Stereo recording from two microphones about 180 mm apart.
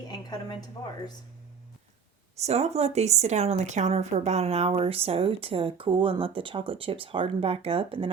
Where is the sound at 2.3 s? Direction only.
35° right (ahead or behind).